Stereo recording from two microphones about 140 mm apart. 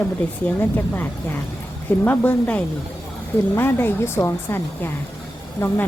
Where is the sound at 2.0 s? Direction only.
10° left (ahead or behind).